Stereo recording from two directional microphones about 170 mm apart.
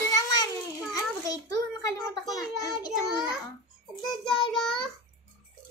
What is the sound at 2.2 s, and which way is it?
Child singing, 20° left (ahead or behind).